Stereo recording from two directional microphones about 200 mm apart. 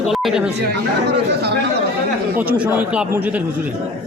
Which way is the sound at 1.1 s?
55° right (ahead or behind).